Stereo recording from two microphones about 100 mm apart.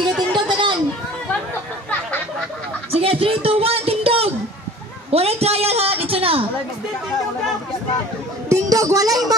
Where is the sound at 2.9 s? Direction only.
70° right (ahead or behind).